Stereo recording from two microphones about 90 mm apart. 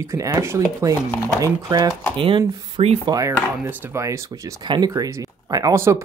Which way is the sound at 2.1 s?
70° right (ahead or behind).